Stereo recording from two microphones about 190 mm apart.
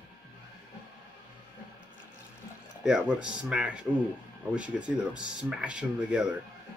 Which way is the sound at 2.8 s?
5° right (ahead or behind).